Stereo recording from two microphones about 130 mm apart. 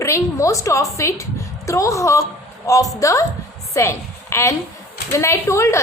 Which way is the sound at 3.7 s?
20° left (ahead or behind).